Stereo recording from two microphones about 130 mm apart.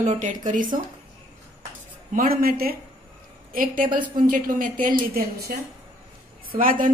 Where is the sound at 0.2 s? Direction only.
75° right (ahead or behind).